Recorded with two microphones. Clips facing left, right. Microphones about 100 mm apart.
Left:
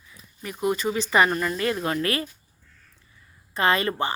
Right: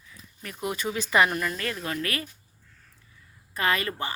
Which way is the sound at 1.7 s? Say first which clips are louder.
Left 6 dB; 35° left (ahead or behind).